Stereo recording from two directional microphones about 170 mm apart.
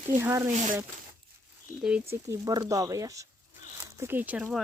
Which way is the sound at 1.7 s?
15° right (ahead or behind).